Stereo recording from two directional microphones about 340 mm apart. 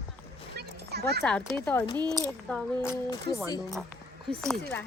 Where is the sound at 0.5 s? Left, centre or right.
Right.